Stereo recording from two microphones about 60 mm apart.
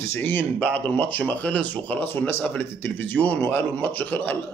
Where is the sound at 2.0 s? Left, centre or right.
Left.